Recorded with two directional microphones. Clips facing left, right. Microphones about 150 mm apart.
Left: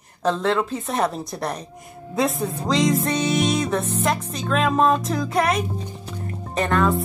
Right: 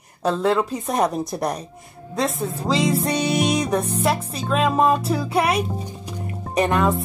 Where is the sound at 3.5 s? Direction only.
15° right (ahead or behind).